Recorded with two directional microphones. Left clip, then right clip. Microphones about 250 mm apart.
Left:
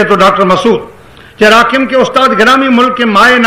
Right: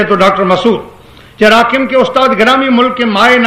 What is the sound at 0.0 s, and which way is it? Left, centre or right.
A man's voice, left.